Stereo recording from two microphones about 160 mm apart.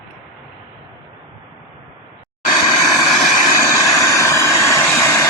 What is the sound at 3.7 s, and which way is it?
Vehicle, 20° left (ahead or behind).